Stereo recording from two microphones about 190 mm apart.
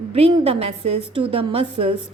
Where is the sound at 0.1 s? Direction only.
30° right (ahead or behind).